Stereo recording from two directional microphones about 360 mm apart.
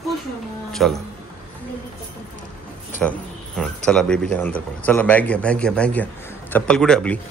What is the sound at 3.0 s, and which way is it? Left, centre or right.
Speech, centre.